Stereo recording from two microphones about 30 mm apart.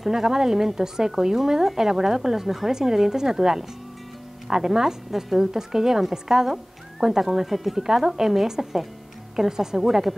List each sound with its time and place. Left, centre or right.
0.0 s speech: centre